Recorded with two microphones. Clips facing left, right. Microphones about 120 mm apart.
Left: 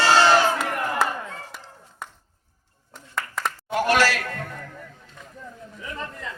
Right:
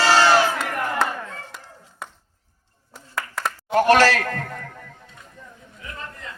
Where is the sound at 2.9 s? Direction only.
5° right (ahead or behind).